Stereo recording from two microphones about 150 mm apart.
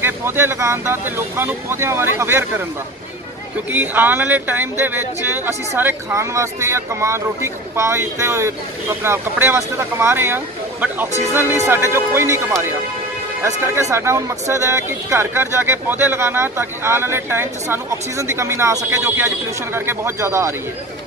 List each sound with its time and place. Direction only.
0.0 s speech: 15° right (ahead or behind)
3.7 s speech: 10° right (ahead or behind)